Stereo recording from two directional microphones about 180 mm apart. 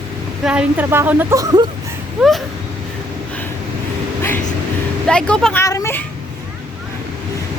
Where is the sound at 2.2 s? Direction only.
Centre (ahead or behind).